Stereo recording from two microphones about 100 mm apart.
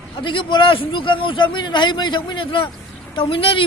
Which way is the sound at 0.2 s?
55° left (ahead or behind).